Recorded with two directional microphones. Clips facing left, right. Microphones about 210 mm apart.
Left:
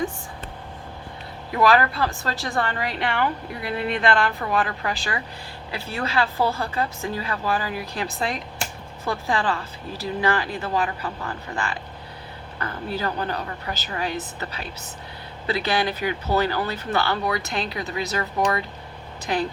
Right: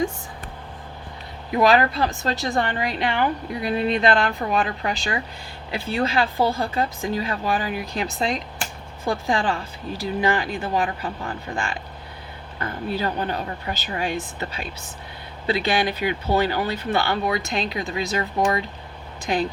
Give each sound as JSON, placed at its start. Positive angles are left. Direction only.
{"t": 1.5, "sound": "a woman's voice", "side_deg": -20}
{"t": 13.0, "sound": "a woman's voice", "side_deg": -20}